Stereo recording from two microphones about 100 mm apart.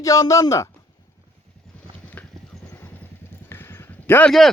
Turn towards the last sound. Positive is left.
turn(degrees=0)  # may be behind; listen again after turning